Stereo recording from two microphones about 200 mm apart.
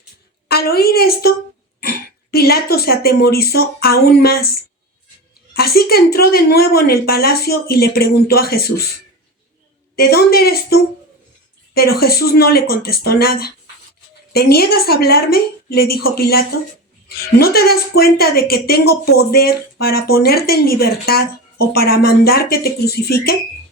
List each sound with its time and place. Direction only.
0.4 s a woman's voice: 50° left (ahead or behind)
5.5 s a woman's voice: 50° left (ahead or behind)
9.9 s a woman's voice: 50° left (ahead or behind)